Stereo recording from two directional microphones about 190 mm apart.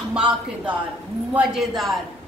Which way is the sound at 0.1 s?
5° right (ahead or behind).